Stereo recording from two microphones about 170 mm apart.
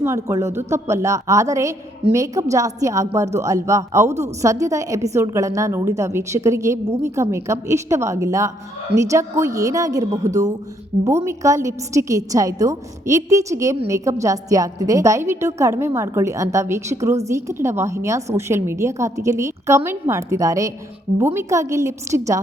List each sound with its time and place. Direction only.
0.0 s a woman's voice: 15° right (ahead or behind)